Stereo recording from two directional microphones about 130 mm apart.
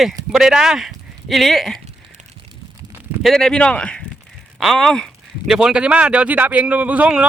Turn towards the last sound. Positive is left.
turn(degrees=-10)  # may be behind; listen again after turning